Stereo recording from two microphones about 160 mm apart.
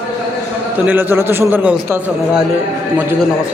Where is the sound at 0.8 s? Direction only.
15° right (ahead or behind).